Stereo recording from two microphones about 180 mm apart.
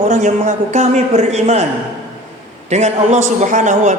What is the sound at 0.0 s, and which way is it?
A man's voice, 45° right (ahead or behind).